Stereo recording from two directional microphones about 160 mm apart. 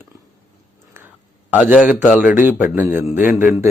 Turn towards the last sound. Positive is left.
turn(degrees=-10)  # may be behind; listen again after turning